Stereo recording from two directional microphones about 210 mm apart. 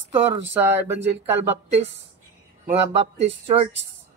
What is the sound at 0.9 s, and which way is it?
Speech, 55° right (ahead or behind).